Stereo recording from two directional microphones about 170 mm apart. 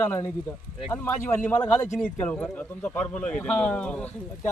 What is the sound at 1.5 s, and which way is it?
Speech, 10° left (ahead or behind).